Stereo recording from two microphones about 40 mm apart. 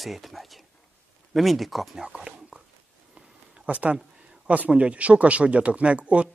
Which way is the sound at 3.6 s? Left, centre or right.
Right.